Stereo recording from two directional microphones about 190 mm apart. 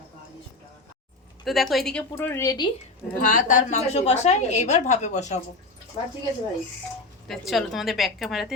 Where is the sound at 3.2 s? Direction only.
40° left (ahead or behind).